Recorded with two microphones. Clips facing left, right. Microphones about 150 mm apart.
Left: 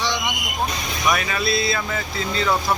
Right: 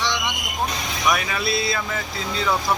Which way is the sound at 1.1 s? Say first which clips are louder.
Left 1 dB; 5° right (ahead or behind).